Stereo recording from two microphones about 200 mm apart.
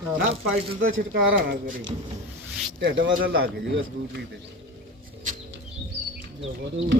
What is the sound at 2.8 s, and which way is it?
Speech, 55° right (ahead or behind).